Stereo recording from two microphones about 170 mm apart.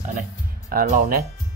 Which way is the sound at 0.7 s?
55° right (ahead or behind).